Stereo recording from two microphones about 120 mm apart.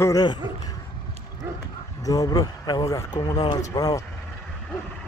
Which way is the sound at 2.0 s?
30° left (ahead or behind).